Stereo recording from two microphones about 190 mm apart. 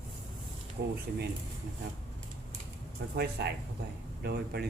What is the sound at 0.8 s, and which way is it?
Speech, 65° right (ahead or behind).